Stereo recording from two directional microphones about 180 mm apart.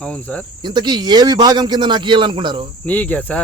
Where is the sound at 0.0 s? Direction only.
5° left (ahead or behind).